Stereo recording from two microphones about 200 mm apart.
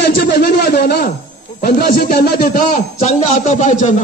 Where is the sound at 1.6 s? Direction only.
45° left (ahead or behind).